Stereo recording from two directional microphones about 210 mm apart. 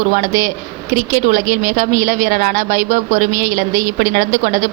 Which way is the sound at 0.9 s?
40° right (ahead or behind).